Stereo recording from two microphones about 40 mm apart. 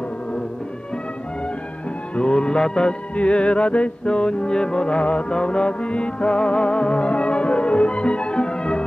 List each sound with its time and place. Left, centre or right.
2.1 s music: left